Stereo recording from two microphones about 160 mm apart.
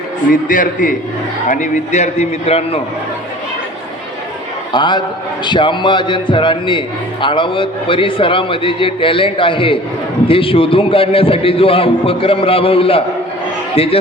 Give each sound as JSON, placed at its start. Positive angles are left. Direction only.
{"t": 0.3, "sound": "a man's voice", "side_deg": 55}
{"t": 4.7, "sound": "a man's voice", "side_deg": 30}